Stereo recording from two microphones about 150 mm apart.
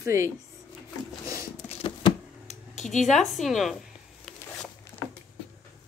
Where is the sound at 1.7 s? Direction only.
40° left (ahead or behind).